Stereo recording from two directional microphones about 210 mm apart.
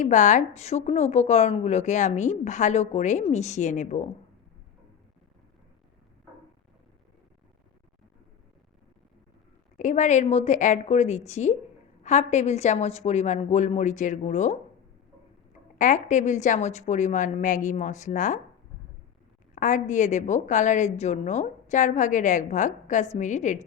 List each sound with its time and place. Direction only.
0.0 s a woman's voice: 35° left (ahead or behind)
9.7 s a woman's voice: 35° left (ahead or behind)
15.8 s a woman's voice: 35° left (ahead or behind)
19.5 s a woman's voice: 35° left (ahead or behind)